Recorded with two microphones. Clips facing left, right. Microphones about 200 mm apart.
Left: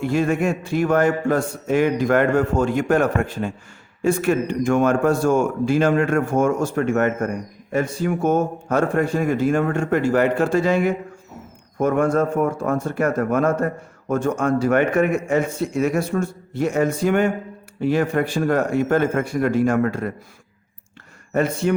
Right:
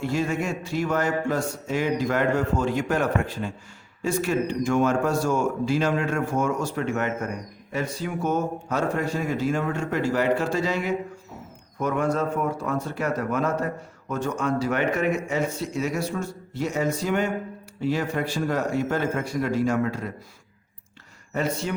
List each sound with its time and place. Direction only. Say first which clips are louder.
0.0 s a man's voice: left 6 dB; 55° left (ahead or behind)
21.6 s speech: left 9 dB; 55° left (ahead or behind)